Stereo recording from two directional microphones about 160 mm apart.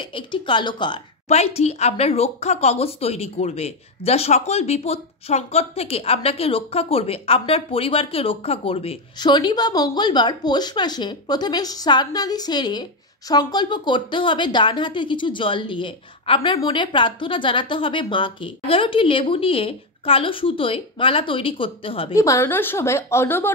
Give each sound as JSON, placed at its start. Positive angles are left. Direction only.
{"t": 0.0, "sound": "speech", "side_deg": 30}
{"t": 1.3, "sound": "speech", "side_deg": 45}
{"t": 22.1, "sound": "a woman's voice", "side_deg": 20}